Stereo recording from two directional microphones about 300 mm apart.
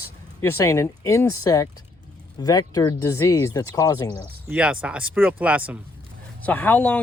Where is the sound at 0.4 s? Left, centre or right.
Centre.